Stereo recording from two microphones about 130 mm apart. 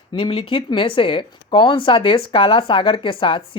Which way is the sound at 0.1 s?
40° left (ahead or behind).